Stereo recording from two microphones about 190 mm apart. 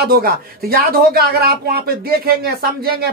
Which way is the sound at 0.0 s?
50° right (ahead or behind).